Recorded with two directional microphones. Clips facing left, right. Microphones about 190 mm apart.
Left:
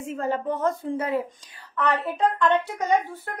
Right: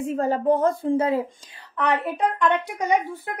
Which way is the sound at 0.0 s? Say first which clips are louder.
Right 5 dB; 35° right (ahead or behind).